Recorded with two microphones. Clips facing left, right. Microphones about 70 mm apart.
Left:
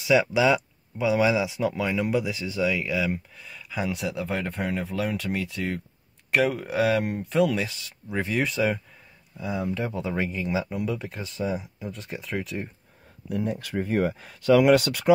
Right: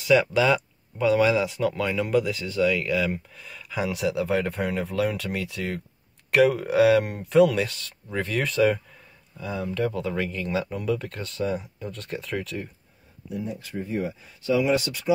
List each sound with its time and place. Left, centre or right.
0.0 s speech: centre
8.1 s speech: centre
8.4 s speech: centre
9.4 s speech: centre
13.3 s speech: left